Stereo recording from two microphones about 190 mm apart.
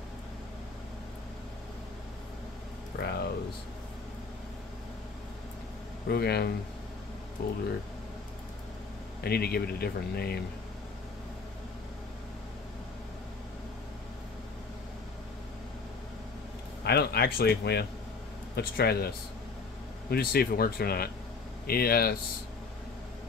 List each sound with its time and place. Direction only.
2.9 s speech: 60° left (ahead or behind)
6.0 s speech: 55° left (ahead or behind)
9.2 s speech: 55° left (ahead or behind)
16.8 s speech: 55° left (ahead or behind)